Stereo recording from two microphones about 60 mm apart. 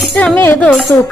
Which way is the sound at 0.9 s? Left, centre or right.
Left.